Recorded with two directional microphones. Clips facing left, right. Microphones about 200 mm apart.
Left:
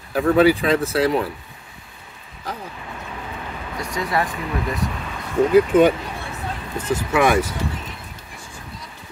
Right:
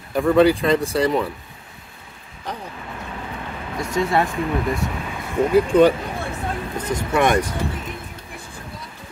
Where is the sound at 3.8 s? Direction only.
25° right (ahead or behind).